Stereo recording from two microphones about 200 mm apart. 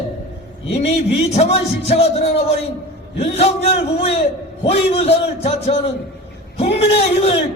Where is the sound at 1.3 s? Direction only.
30° left (ahead or behind).